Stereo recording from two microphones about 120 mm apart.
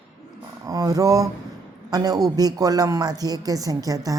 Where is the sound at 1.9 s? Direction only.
30° right (ahead or behind).